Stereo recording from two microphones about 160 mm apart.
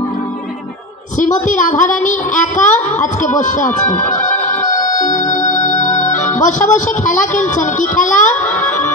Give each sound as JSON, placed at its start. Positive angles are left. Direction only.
{"t": 1.2, "sound": "a woman's voice", "side_deg": 50}